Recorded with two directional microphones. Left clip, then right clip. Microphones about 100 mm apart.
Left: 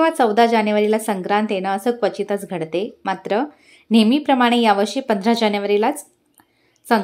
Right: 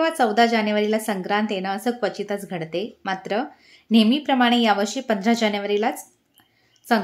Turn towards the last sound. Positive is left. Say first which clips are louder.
# left 3 dB
turn(degrees=30)  # may be behind; listen again after turning